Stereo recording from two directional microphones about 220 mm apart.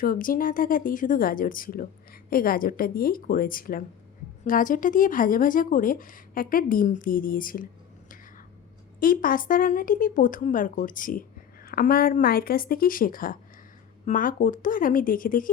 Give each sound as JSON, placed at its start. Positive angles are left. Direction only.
{"t": 0.0, "sound": "speech", "side_deg": 40}
{"t": 9.0, "sound": "speech", "side_deg": 40}